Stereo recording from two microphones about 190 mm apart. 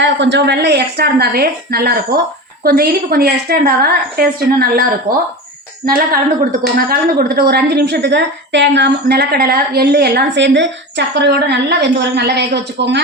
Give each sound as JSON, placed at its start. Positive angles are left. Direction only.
{"t": 0.0, "sound": "a woman's voice", "side_deg": -70}